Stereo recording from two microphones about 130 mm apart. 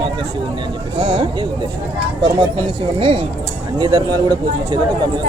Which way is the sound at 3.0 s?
45° right (ahead or behind).